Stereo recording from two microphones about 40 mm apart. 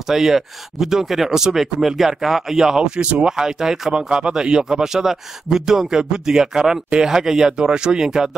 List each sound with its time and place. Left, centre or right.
0.1 s speech: centre
3.0 s speech: right
3.3 s speech: centre